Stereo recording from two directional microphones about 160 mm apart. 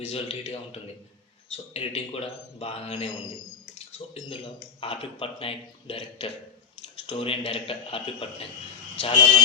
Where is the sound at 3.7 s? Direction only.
40° left (ahead or behind).